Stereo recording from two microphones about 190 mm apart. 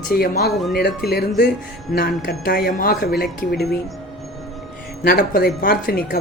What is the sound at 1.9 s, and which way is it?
A woman's voice, 50° left (ahead or behind).